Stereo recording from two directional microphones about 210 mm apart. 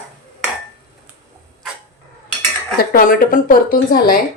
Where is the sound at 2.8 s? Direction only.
45° left (ahead or behind).